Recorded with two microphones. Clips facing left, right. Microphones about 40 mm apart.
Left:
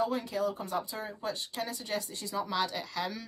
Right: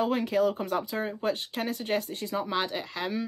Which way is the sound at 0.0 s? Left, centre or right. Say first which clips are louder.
Right 5 dB; right.